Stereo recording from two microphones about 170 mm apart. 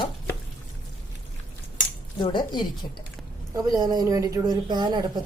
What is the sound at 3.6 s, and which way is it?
A woman's voice, 20° right (ahead or behind).